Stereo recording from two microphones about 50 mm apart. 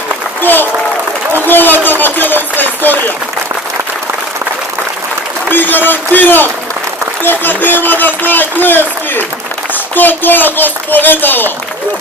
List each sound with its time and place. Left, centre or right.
0.4 s a man's voice: left
5.5 s a man's voice: left